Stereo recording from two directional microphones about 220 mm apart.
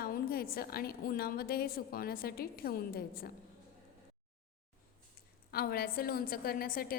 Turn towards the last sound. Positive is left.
turn(degrees=45)  # may be behind; listen again after turning